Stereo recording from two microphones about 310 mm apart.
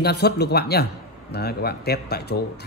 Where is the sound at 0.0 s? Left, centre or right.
Left.